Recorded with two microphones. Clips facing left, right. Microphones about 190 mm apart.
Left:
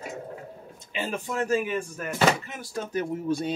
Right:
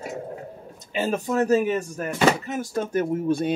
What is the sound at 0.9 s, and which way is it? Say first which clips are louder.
Speech: right 7 dB; 45° right (ahead or behind).